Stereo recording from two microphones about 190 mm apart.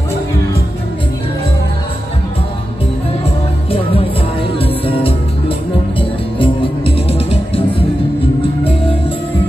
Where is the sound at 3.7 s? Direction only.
30° left (ahead or behind).